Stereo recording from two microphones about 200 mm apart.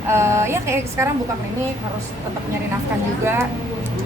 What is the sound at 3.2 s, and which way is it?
Speech, 10° right (ahead or behind).